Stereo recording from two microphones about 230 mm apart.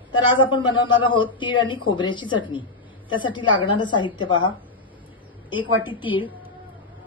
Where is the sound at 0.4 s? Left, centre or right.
Left.